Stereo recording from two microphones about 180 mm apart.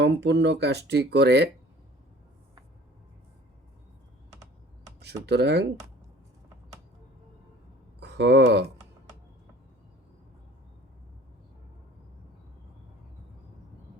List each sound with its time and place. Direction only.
0.0 s speech: 75° right (ahead or behind)
5.0 s speech: 65° right (ahead or behind)
7.9 s speech: 65° right (ahead or behind)